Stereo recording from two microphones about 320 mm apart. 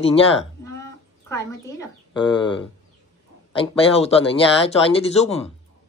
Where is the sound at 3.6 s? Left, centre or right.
Centre.